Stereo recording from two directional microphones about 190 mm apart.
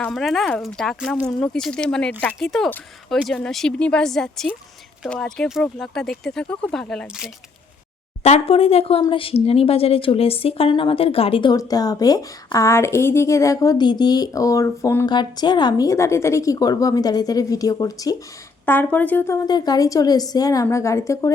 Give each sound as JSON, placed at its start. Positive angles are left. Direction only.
{"t": 0.0, "sound": "speech", "side_deg": 0}
{"t": 8.2, "sound": "speech", "side_deg": 30}